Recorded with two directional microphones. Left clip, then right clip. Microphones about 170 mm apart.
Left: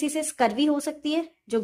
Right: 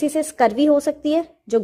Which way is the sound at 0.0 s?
30° right (ahead or behind).